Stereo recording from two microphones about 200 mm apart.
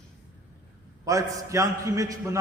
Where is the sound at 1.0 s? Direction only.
15° right (ahead or behind).